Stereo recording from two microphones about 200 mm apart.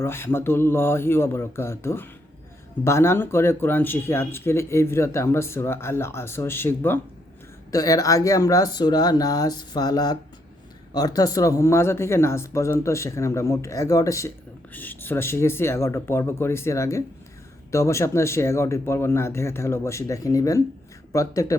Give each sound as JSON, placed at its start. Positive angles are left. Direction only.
{"t": 0.0, "sound": "speech", "side_deg": 10}